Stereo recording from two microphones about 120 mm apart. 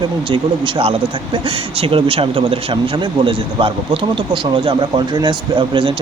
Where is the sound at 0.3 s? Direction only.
45° right (ahead or behind).